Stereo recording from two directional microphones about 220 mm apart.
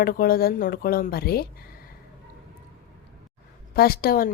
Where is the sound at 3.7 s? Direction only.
45° left (ahead or behind).